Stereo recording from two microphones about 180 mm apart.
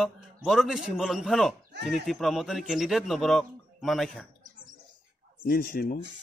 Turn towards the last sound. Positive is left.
turn(degrees=55)  # may be behind; listen again after turning